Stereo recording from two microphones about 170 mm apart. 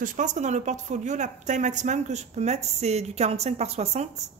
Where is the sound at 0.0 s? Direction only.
50° right (ahead or behind).